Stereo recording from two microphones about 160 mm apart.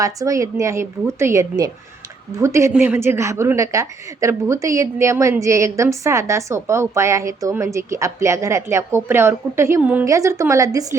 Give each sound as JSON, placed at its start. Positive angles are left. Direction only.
{"t": 0.0, "sound": "a woman's voice", "side_deg": -20}